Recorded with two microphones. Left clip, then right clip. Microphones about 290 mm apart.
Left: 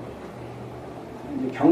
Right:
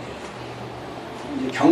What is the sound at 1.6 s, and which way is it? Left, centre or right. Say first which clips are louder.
Speech: right 2 dB; left.